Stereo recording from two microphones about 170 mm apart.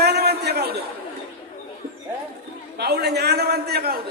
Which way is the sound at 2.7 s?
75° right (ahead or behind).